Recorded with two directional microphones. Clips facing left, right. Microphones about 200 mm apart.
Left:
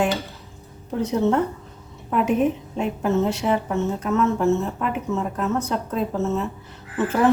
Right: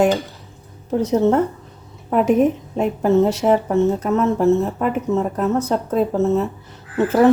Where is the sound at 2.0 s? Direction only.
40° right (ahead or behind).